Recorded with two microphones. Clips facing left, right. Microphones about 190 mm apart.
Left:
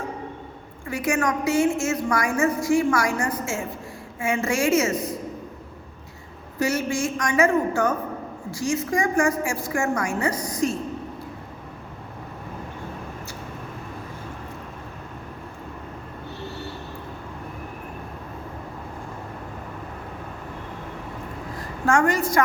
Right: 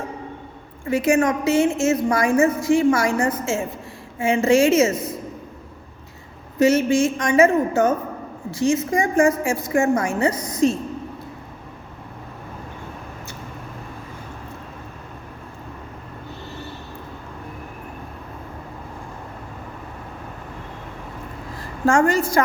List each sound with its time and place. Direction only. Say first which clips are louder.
0.9 s a woman's voice: right 6 dB; 25° right (ahead or behind)
6.6 s a woman's voice: right 8 dB; 20° right (ahead or behind)
21.8 s a woman's voice: right 3 dB; 30° right (ahead or behind)